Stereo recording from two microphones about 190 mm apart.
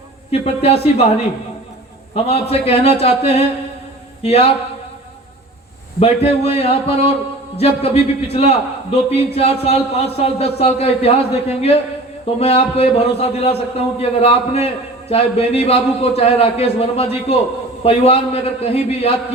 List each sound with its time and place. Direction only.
0.3 s a man's voice: 35° left (ahead or behind)
2.1 s a man's voice: 35° left (ahead or behind)
6.0 s a man's voice: 30° left (ahead or behind)